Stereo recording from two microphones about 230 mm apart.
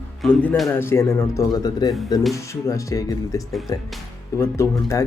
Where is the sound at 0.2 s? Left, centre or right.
Centre.